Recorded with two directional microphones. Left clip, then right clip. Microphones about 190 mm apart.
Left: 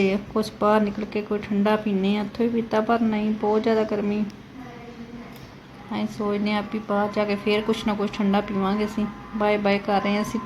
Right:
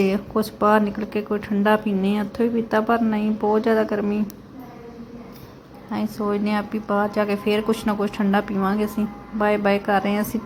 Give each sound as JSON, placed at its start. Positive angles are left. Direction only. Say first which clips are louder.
{"t": 0.0, "sound": "speech", "louder": "right 2 dB", "side_deg": -15}
{"t": 5.9, "sound": "speech", "louder": "right 2 dB", "side_deg": -15}